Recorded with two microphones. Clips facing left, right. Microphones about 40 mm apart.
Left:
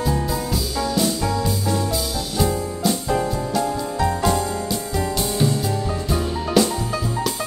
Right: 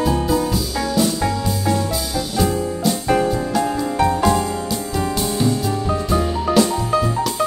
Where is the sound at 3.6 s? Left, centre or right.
Right.